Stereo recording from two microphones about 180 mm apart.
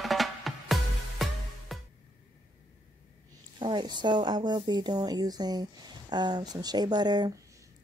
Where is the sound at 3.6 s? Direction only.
25° right (ahead or behind).